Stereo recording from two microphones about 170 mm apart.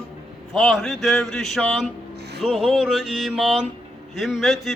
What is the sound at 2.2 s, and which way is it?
Music, 75° right (ahead or behind).